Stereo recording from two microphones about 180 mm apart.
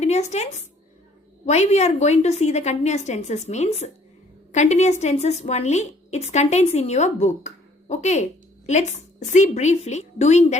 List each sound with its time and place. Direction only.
0.0 s a woman's voice: 40° left (ahead or behind)